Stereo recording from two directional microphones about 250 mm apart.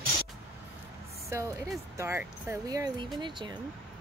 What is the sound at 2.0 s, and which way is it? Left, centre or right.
Speech, centre.